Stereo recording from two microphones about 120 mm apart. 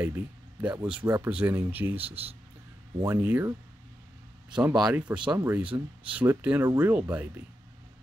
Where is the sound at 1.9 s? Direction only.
55° right (ahead or behind).